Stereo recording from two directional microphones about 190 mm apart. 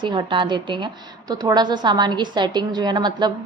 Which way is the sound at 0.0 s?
25° right (ahead or behind).